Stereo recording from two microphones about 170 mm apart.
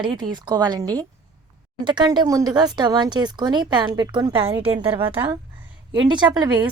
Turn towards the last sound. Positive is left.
turn(degrees=-25)  # may be behind; listen again after turning